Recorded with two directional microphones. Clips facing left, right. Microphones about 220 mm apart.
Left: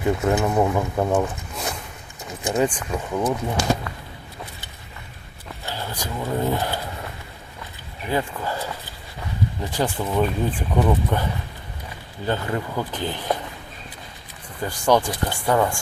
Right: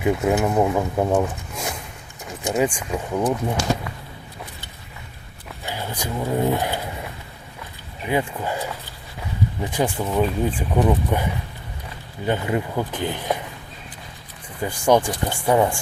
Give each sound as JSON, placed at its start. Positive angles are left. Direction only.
{"t": 0.0, "sound": "speech", "side_deg": -10}
{"t": 5.6, "sound": "speech", "side_deg": -15}
{"t": 8.0, "sound": "speech", "side_deg": -15}
{"t": 9.6, "sound": "speech", "side_deg": -10}
{"t": 14.6, "sound": "speech", "side_deg": -15}